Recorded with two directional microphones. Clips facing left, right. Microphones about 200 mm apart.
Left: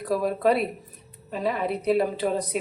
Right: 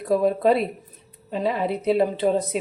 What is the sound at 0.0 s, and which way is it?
A woman's voice, 25° right (ahead or behind).